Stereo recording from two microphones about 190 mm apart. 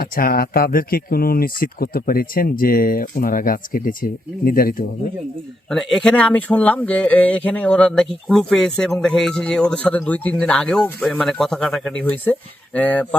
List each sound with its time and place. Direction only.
0.0 s speech: 50° left (ahead or behind)
5.6 s speech: centre (ahead or behind)